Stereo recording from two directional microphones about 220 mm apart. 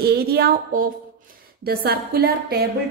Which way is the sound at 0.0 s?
45° right (ahead or behind).